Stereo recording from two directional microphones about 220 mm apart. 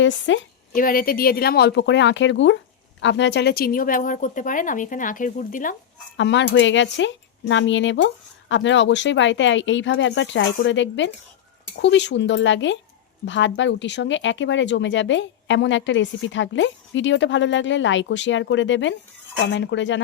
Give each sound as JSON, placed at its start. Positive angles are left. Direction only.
{"t": 0.0, "sound": "speech", "side_deg": 55}
{"t": 0.7, "sound": "speech", "side_deg": 40}
{"t": 6.1, "sound": "speech", "side_deg": 55}